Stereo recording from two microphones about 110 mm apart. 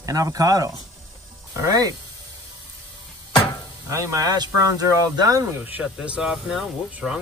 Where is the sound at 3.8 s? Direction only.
30° right (ahead or behind).